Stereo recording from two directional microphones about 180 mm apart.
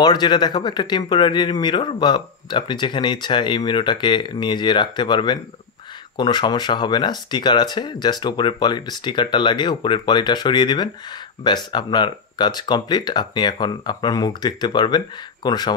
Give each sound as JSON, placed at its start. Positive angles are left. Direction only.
{"t": 0.0, "sound": "speech", "side_deg": 25}